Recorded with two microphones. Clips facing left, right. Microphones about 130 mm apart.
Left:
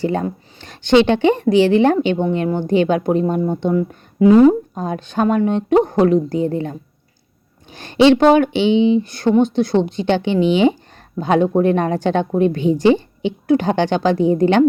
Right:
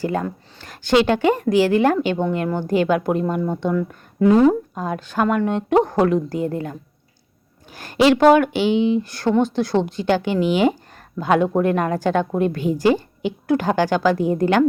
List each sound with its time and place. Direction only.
0.0 s speech: 25° left (ahead or behind)